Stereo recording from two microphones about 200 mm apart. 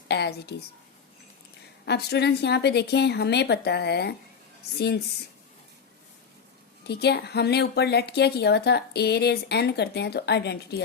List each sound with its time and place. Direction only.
0.1 s a woman's voice: 55° left (ahead or behind)
1.8 s a woman's voice: 55° left (ahead or behind)
6.8 s a woman's voice: 55° left (ahead or behind)